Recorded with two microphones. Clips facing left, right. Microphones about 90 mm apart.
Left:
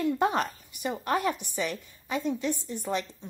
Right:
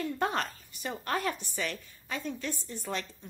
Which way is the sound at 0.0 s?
20° left (ahead or behind).